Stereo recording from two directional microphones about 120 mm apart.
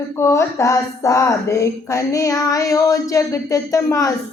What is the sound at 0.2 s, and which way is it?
Child singing, 25° left (ahead or behind).